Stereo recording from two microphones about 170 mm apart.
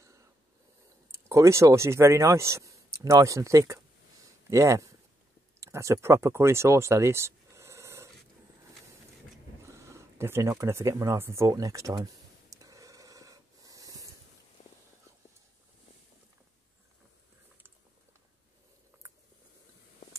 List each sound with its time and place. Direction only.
1.3 s speech: 15° right (ahead or behind)
9.7 s a sound: 15° right (ahead or behind)
14.6 s whispering: 40° left (ahead or behind)
19.0 s biting: 20° right (ahead or behind)